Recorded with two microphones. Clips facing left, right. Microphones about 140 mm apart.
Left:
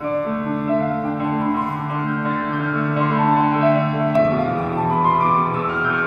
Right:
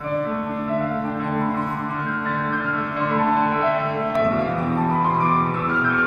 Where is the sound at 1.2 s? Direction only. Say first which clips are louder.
Left 3 dB; 15° left (ahead or behind).